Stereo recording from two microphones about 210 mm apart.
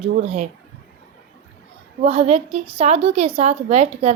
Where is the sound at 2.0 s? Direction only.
30° right (ahead or behind).